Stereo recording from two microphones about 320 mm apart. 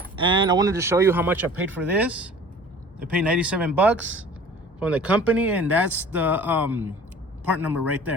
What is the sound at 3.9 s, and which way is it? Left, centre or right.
Speech, right.